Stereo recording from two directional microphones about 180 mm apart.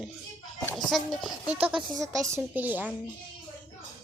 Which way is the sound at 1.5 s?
30° right (ahead or behind).